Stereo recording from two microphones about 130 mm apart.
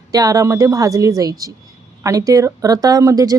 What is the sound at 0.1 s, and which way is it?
Speech, 25° right (ahead or behind).